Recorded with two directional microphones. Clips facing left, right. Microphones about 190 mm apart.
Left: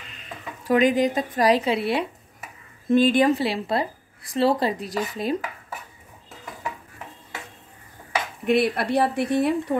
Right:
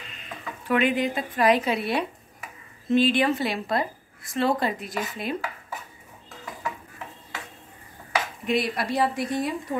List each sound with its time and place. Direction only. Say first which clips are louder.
0.7 s speech: left 4 dB; 40° left (ahead or behind)
2.9 s a woman's voice: left 3 dB; 50° left (ahead or behind)
3.4 s speech: left 2 dB; 30° left (ahead or behind)
8.5 s speech: left 6 dB; 60° left (ahead or behind)